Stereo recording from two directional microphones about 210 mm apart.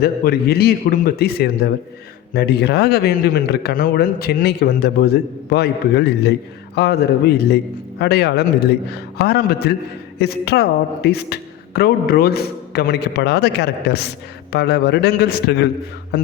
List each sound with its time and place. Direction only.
0.0 s a man's voice: 50° left (ahead or behind)